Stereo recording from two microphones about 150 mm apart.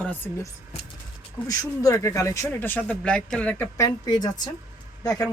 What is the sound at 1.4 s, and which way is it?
Speech, 20° left (ahead or behind).